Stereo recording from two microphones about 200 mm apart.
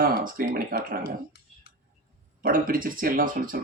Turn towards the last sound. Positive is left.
turn(degrees=-45)  # may be behind; listen again after turning